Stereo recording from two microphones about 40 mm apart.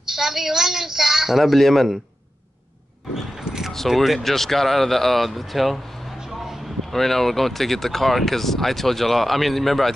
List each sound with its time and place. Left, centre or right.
0.0 s a woman's voice: centre
3.7 s speech: centre
6.1 s a sound: centre
6.9 s speech: centre